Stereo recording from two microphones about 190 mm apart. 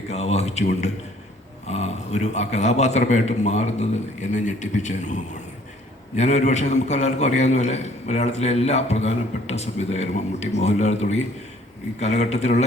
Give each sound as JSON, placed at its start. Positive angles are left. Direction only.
{"t": 0.1, "sound": "a man's voice", "side_deg": 35}
{"t": 6.1, "sound": "a man's voice", "side_deg": 35}